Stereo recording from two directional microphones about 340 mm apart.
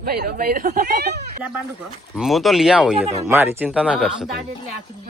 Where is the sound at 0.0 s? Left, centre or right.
Right.